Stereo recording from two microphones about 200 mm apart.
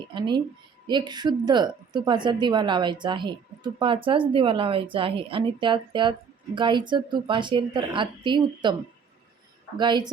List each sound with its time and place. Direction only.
0.1 s a woman's voice: 25° right (ahead or behind)
9.7 s a woman's voice: 20° right (ahead or behind)